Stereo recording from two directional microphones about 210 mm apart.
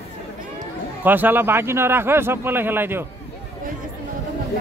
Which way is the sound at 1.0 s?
10° right (ahead or behind).